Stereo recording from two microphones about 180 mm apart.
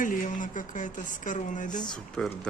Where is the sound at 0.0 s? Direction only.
45° left (ahead or behind).